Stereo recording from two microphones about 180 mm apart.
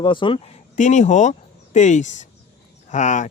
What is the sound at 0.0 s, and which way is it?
Speech, 25° left (ahead or behind).